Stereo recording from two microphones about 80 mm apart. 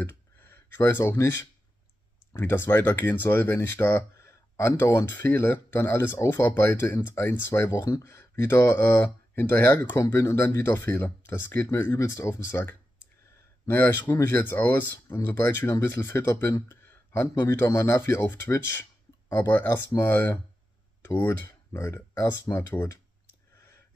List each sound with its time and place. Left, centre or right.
0.7 s speech: left
1.0 s speech: left